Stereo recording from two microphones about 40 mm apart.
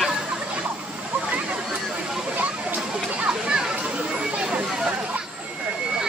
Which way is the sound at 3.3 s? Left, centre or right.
Right.